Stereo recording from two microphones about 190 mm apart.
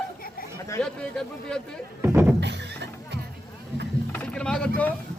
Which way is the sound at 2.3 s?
65° right (ahead or behind).